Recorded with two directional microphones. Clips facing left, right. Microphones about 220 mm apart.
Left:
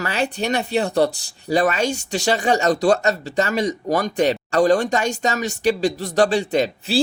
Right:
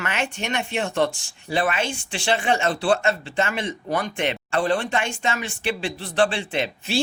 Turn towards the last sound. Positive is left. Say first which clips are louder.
# left 6 dB
turn(degrees=40)  # may be behind; listen again after turning